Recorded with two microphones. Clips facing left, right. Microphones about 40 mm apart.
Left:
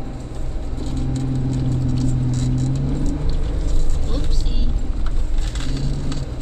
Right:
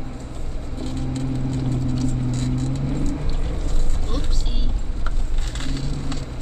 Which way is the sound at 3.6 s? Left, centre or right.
Right.